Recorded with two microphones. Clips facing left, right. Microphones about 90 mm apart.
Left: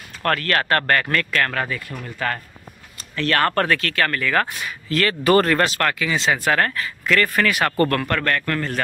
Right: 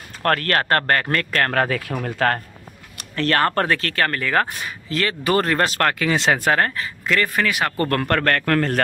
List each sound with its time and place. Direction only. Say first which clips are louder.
0.2 s speech: right 1 dB; 40° right (ahead or behind)
1.6 s speech: right 5 dB; 90° right
2.0 s speech: right 5 dB; 70° right (ahead or behind)
3.2 s speech: right 1 dB; 35° right (ahead or behind)
3.4 s speech: even; 25° right (ahead or behind)
4.9 s speech: left 3 dB; 15° right (ahead or behind)
5.7 s speech: right 2 dB; 45° right (ahead or behind); by 6.4 s 60° right (ahead or behind)
6.4 s speech: right 1 dB; 25° right (ahead or behind)
7.9 s speech: right 2 dB; 40° right (ahead or behind)
8.2 s a man's voice: right 3 dB; 60° right (ahead or behind)